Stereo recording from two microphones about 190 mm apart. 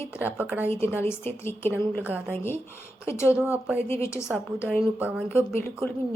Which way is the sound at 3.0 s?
15° left (ahead or behind).